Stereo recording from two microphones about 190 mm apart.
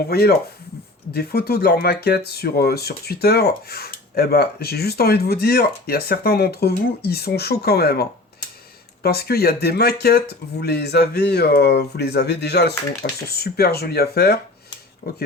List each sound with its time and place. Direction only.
0.1 s speech: 55° left (ahead or behind)
9.0 s speech: 55° left (ahead or behind)